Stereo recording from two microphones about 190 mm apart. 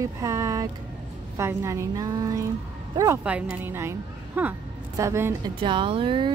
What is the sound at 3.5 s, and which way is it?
A woman's voice, 10° right (ahead or behind).